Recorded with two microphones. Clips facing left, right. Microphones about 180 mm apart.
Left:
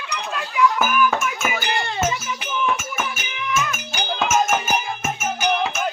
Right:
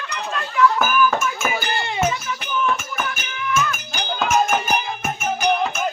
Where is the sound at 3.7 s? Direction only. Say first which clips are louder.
Even; centre (ahead or behind).